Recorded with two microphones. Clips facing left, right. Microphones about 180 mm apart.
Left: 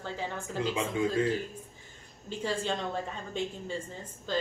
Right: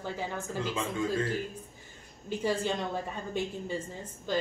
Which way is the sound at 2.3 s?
10° right (ahead or behind).